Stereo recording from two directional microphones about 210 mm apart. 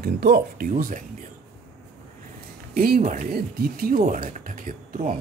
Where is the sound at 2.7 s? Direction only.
40° right (ahead or behind).